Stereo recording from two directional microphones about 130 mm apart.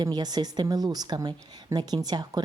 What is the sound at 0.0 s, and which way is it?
Speech, 30° right (ahead or behind).